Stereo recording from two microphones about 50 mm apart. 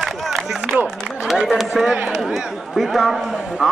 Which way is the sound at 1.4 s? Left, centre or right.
Centre.